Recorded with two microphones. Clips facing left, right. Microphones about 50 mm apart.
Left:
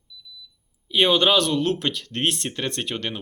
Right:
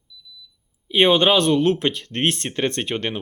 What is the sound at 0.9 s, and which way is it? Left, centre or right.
Speech, right.